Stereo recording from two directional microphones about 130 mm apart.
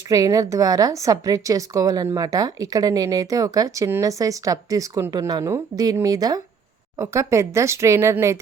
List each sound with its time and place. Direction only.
0.1 s a woman's voice: 25° right (ahead or behind)